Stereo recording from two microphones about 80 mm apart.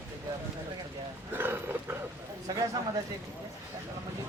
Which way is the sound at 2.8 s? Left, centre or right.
Right.